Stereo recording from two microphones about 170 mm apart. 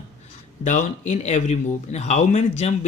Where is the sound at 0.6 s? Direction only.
45° left (ahead or behind).